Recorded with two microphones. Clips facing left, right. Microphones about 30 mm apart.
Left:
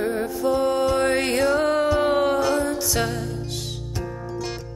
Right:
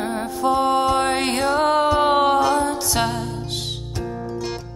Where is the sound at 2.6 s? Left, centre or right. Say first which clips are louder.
Right 2 dB; right.